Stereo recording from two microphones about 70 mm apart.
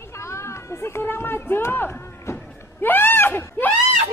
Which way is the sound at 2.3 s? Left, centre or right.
Left.